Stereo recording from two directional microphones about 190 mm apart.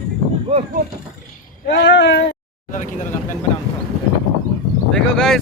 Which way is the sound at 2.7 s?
45° left (ahead or behind).